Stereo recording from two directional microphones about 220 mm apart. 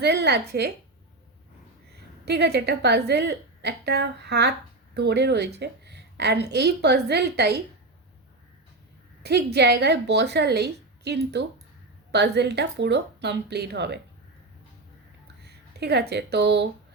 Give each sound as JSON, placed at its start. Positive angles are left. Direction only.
{"t": 0.0, "sound": "a woman's voice", "side_deg": -50}
{"t": 2.2, "sound": "a woman's voice", "side_deg": -50}
{"t": 9.2, "sound": "a woman's voice", "side_deg": -50}
{"t": 15.4, "sound": "speech", "side_deg": -50}